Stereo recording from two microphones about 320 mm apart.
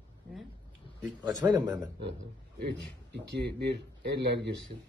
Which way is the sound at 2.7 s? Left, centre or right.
Right.